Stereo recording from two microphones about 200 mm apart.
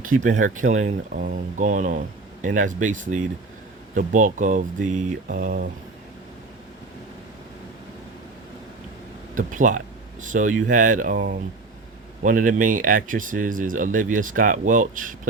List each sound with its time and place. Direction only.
0.0 s speech: 40° right (ahead or behind)
9.3 s speech: 40° right (ahead or behind)